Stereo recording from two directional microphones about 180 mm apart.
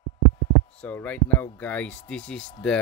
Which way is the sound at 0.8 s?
5° left (ahead or behind).